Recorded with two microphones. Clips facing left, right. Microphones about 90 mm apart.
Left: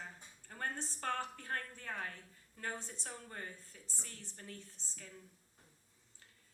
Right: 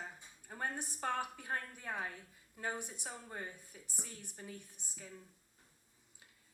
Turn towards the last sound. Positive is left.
turn(degrees=-15)  # may be behind; listen again after turning